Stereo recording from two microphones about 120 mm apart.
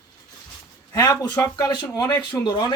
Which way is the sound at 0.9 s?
30° left (ahead or behind).